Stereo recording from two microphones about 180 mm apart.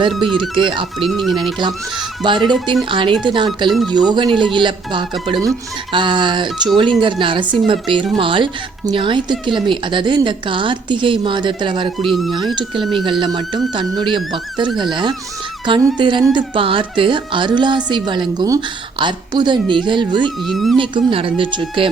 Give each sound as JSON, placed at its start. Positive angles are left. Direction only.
{"t": 0.3, "sound": "speech", "side_deg": -25}
{"t": 1.0, "sound": "speech", "side_deg": 0}
{"t": 1.5, "sound": "speech", "side_deg": -25}
{"t": 20.5, "sound": "speech", "side_deg": 0}
{"t": 20.7, "sound": "speech", "side_deg": -30}